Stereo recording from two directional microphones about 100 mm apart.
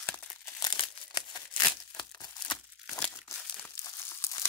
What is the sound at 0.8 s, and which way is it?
Crumpling, 45° left (ahead or behind).